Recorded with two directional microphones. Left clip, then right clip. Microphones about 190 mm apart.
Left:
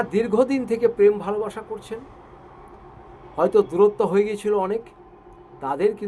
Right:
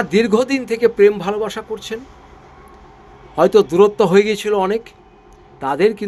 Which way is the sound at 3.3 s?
55° right (ahead or behind).